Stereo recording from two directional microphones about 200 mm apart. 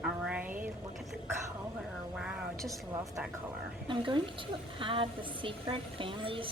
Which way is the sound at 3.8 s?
25° right (ahead or behind).